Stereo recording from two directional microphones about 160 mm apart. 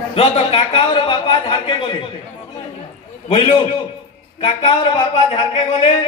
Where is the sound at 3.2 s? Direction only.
40° left (ahead or behind).